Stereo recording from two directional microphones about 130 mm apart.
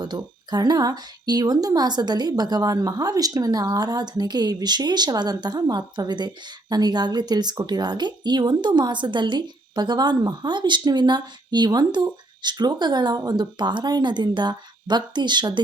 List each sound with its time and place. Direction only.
0.0 s a woman's voice: 30° right (ahead or behind)